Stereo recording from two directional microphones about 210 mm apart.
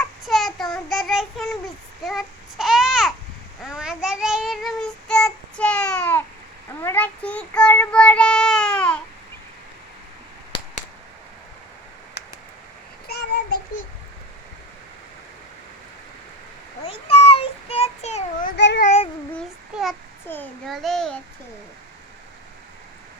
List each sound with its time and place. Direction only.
0.3 s child singing: centre (ahead or behind)
2.0 s babbling: centre (ahead or behind)
3.6 s child singing: centre (ahead or behind)
13.1 s child singing: 50° left (ahead or behind)
16.8 s a sound: 25° left (ahead or behind)
17.2 s child singing: 25° left (ahead or behind)
18.5 s a sound: 55° left (ahead or behind)
18.8 s child singing: 30° left (ahead or behind)
19.4 s child singing: centre (ahead or behind)